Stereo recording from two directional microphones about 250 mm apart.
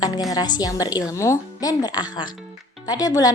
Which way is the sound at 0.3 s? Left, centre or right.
Centre.